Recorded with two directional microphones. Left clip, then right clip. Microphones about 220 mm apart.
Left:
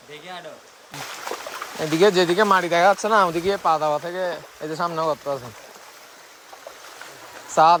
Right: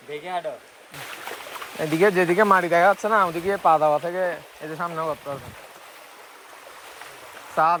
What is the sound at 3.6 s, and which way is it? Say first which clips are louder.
Speech: right 5 dB; centre (ahead or behind).